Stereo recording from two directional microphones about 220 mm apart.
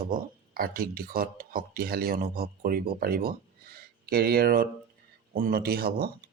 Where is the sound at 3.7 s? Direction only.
45° right (ahead or behind).